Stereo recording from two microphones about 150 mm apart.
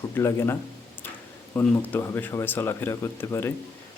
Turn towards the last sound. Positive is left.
turn(degrees=15)  # may be behind; listen again after turning